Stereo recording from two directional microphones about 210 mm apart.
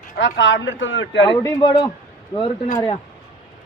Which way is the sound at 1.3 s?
20° left (ahead or behind).